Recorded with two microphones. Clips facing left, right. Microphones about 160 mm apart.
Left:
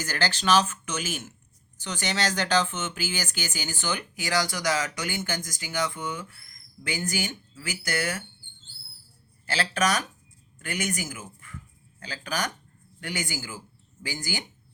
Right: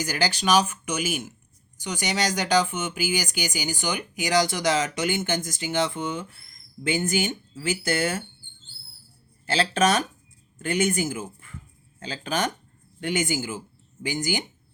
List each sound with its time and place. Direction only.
0.0 s speech: 10° right (ahead or behind); by 8.2 s 25° right (ahead or behind)
9.5 s speech: 25° right (ahead or behind)